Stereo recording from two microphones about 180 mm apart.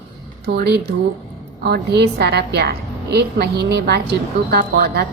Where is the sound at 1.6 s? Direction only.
65° right (ahead or behind).